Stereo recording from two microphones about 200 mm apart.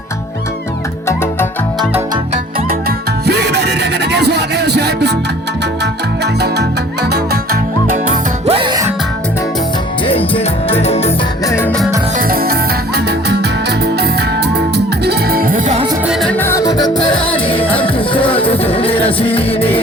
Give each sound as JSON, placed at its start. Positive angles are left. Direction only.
{"t": 1.0, "sound": "music", "side_deg": 10}
{"t": 3.2, "sound": "music", "side_deg": -55}
{"t": 8.5, "sound": "music", "side_deg": -20}
{"t": 10.1, "sound": "music", "side_deg": 30}
{"t": 11.4, "sound": "music", "side_deg": 10}
{"t": 12.1, "sound": "music", "side_deg": -45}
{"t": 16.0, "sound": "music", "side_deg": 0}